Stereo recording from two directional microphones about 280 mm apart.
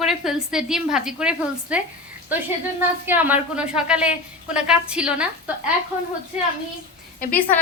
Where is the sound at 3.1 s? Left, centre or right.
Centre.